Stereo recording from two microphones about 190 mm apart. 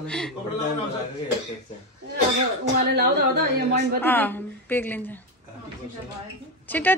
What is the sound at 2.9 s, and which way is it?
Speech, 65° right (ahead or behind).